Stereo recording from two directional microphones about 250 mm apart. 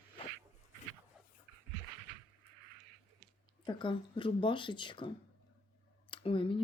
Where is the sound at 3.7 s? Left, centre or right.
Centre.